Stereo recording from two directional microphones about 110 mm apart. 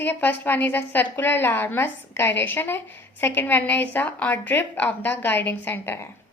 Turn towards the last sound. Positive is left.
turn(degrees=20)  # may be behind; listen again after turning